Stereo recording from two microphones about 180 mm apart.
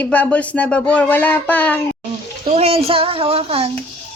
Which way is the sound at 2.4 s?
35° right (ahead or behind).